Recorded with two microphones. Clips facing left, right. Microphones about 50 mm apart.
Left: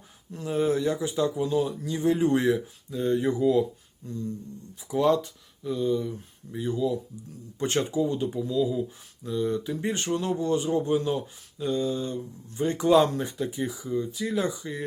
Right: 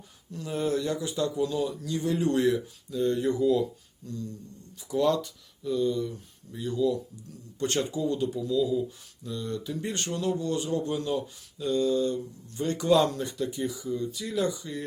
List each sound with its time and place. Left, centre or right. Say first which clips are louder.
0.3 s speech: left 3 dB; centre